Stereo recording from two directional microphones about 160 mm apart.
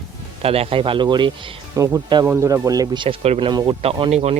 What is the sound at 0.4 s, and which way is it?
Speech, 40° right (ahead or behind).